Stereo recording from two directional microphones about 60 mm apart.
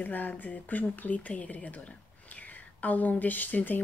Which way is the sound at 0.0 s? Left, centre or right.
Left.